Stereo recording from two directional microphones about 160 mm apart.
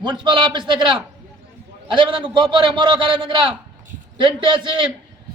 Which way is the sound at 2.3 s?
30° right (ahead or behind).